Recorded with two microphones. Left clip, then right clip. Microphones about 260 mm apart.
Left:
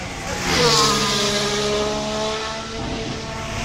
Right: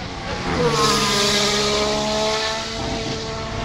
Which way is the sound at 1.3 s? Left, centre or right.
Centre.